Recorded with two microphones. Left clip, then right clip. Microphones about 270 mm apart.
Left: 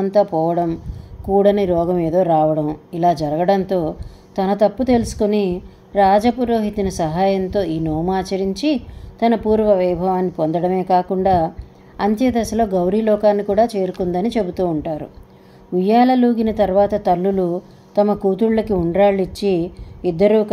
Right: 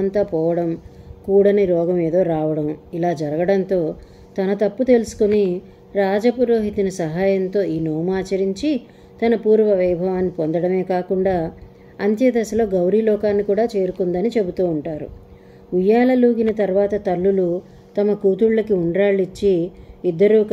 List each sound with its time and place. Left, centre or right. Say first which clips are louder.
0.0 s a woman's voice: left 3 dB; centre